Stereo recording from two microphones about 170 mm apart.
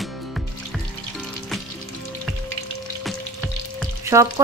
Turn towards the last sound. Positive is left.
turn(degrees=-15)  # may be behind; listen again after turning